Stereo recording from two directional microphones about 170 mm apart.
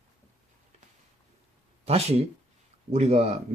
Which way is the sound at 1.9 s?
35° right (ahead or behind).